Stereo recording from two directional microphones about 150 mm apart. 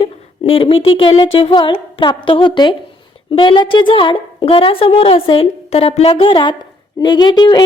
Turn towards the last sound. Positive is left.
turn(degrees=30)  # may be behind; listen again after turning